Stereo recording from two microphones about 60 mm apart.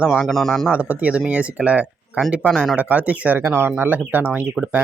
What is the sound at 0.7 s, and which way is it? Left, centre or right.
Speech, right.